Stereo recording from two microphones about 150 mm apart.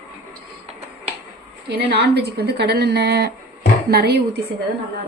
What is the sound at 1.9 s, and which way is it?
A woman's voice, 90° right.